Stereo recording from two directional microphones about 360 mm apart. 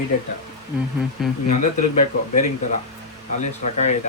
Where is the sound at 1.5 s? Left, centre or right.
Centre.